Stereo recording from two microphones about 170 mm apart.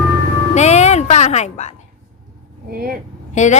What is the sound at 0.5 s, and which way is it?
Music, 40° left (ahead or behind).